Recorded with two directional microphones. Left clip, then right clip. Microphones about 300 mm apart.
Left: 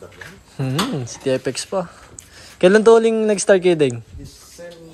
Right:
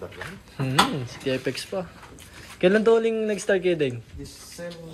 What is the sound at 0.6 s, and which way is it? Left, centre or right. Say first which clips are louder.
A man's voice: right 1 dB; centre.